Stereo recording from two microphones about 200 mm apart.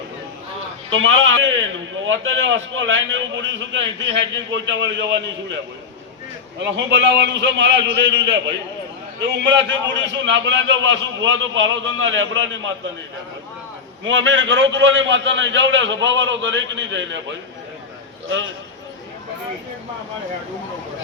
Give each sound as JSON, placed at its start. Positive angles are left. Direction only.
{"t": 0.9, "sound": "a man's voice", "side_deg": -75}
{"t": 6.7, "sound": "a man's voice", "side_deg": -65}
{"t": 14.0, "sound": "a man's voice", "side_deg": -70}